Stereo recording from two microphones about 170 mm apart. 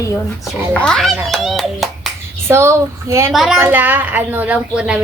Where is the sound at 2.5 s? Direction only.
15° right (ahead or behind).